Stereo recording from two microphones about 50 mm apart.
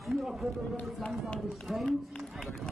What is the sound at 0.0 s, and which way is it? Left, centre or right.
Run, centre.